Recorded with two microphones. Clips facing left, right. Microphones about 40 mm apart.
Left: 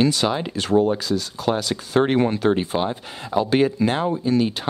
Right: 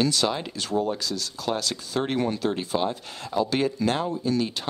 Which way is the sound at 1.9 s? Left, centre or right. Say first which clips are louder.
Left 8 dB; left.